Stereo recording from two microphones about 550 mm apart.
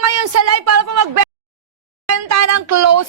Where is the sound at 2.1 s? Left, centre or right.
Right.